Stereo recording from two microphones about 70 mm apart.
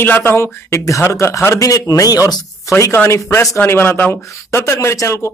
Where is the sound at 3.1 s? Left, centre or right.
Left.